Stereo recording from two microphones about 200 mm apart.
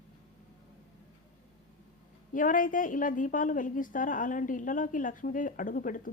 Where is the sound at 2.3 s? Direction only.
40° left (ahead or behind).